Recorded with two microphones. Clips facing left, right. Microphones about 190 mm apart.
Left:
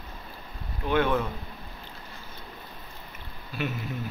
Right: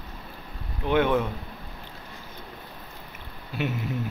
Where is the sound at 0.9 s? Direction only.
15° right (ahead or behind).